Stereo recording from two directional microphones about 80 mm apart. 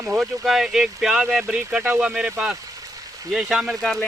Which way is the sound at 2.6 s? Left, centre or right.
Right.